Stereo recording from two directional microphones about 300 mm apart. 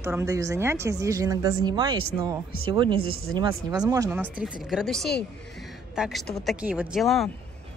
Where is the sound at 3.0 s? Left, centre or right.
Right.